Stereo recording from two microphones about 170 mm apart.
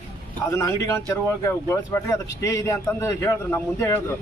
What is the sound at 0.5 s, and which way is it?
A man's voice, 15° left (ahead or behind).